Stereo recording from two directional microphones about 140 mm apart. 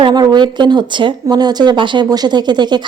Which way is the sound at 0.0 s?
30° right (ahead or behind).